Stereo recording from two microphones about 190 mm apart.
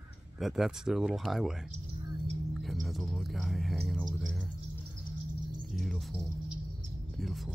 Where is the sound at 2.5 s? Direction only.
Centre (ahead or behind).